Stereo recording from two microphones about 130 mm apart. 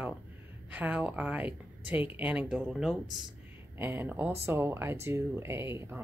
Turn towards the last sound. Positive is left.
turn(degrees=-20)  # may be behind; listen again after turning